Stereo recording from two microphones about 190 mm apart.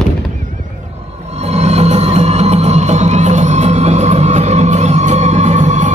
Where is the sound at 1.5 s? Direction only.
35° right (ahead or behind).